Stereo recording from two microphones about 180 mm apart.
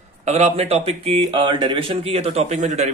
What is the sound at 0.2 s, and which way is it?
A man's voice, 40° right (ahead or behind).